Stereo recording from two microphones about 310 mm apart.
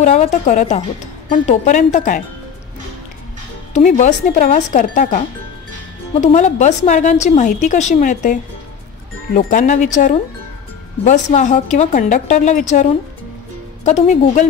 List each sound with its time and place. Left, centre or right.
0.0 s a woman's voice: left
3.7 s a woman's voice: left
6.2 s a woman's voice: left
13.8 s a woman's voice: left